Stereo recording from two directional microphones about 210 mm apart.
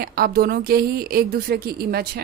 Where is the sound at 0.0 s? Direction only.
45° right (ahead or behind).